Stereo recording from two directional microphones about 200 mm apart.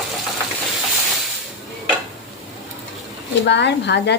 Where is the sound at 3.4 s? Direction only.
60° left (ahead or behind).